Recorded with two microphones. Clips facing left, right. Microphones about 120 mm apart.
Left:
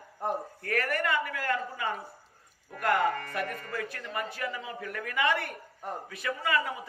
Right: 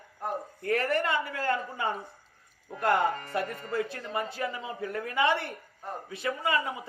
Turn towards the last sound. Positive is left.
turn(degrees=-25)  # may be behind; listen again after turning